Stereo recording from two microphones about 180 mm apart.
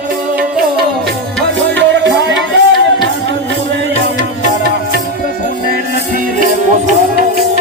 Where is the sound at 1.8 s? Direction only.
90° right.